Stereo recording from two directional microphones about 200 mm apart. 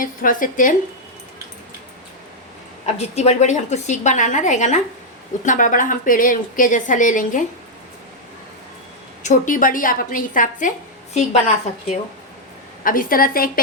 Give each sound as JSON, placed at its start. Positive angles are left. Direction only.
{"t": 0.0, "sound": "a woman's voice", "side_deg": 40}
{"t": 2.8, "sound": "a woman's voice", "side_deg": 35}
{"t": 9.2, "sound": "a woman's voice", "side_deg": 40}
{"t": 12.8, "sound": "a woman's voice", "side_deg": 45}